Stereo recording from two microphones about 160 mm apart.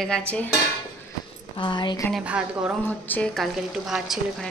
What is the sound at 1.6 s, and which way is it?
Speech, 30° left (ahead or behind).